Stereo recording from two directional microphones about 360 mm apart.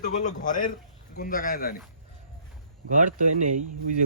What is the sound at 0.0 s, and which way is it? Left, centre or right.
A man's voice, centre.